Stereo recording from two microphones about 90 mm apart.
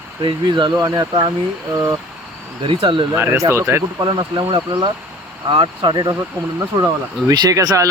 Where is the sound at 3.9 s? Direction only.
50° right (ahead or behind).